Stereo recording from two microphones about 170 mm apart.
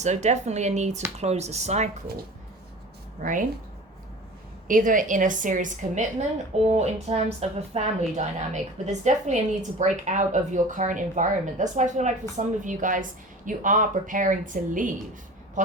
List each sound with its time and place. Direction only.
0.0 s a woman's voice: 45° right (ahead or behind)
3.2 s a woman's voice: 50° right (ahead or behind)
4.7 s a woman's voice: 50° right (ahead or behind)